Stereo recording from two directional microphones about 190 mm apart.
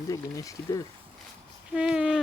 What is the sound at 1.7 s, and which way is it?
Speech, 5° right (ahead or behind).